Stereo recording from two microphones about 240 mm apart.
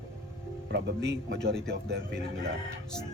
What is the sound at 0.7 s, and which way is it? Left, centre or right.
A man's voice, right.